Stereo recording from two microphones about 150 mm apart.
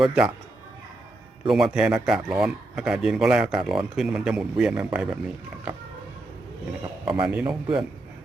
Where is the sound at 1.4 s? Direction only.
5° right (ahead or behind).